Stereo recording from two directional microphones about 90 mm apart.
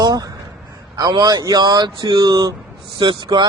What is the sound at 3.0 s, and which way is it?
Speech, 60° right (ahead or behind).